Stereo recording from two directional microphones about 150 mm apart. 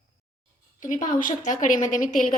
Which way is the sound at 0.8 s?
60° left (ahead or behind).